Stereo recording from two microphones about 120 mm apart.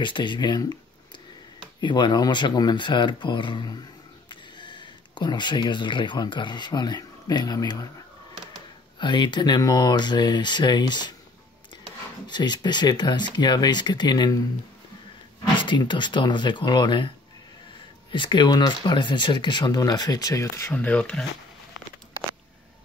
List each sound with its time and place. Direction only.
0.0 s speech: 40° left (ahead or behind)
8.9 s speech: 40° left (ahead or behind)
12.3 s speech: 35° left (ahead or behind)
15.5 s speech: 40° left (ahead or behind)
18.1 s speech: 40° left (ahead or behind); by 20.7 s 25° left (ahead or behind)
20.7 s speech: 10° left (ahead or behind)